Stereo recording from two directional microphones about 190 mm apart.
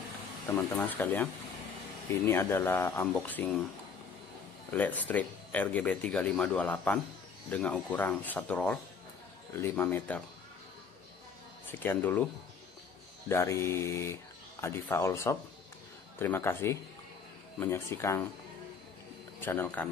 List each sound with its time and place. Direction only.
0.5 s speech: 15° left (ahead or behind)
4.6 s speech: 10° left (ahead or behind)
11.8 s speech: 10° left (ahead or behind)
13.3 s speech: 15° left (ahead or behind)
19.4 s speech: 10° left (ahead or behind)